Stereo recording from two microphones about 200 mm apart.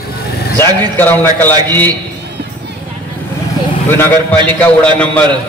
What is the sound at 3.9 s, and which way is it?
A man's voice, 10° left (ahead or behind).